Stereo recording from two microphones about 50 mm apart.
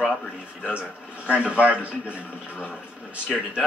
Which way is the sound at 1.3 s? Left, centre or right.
Right.